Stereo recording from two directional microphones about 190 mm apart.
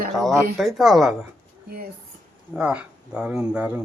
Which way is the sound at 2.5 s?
5° right (ahead or behind).